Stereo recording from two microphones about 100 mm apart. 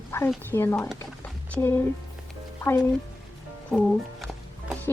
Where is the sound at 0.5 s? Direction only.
25° left (ahead or behind).